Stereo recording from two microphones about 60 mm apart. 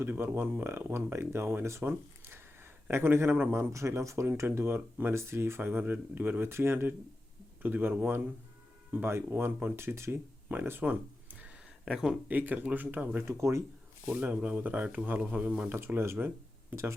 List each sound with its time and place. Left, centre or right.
0.0 s speech: right
3.7 s speech: right
4.4 s speech: right
9.7 s speech: right
10.5 s a sound: right
11.9 s speech: centre
12.3 s speech: right
13.2 s speech: right
14.1 s speech: right
15.2 s speech: right
15.7 s speech: right